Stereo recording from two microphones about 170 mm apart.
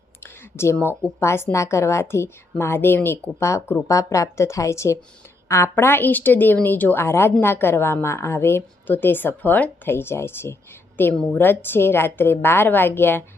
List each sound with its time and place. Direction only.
0.2 s a woman's voice: 15° left (ahead or behind)